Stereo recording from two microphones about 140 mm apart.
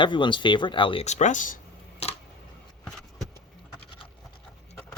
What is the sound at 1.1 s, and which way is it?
Speech, 55° left (ahead or behind).